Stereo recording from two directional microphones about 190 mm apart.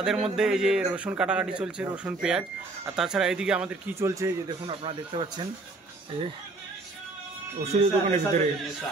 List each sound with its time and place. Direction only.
0.0 s a man's voice: centre (ahead or behind)
4.6 s speech: 25° right (ahead or behind)
7.6 s speech: 35° right (ahead or behind)